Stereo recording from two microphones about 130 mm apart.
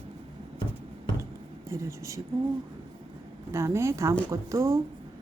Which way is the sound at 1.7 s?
20° right (ahead or behind).